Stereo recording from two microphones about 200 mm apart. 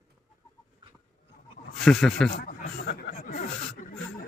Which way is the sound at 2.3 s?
50° left (ahead or behind).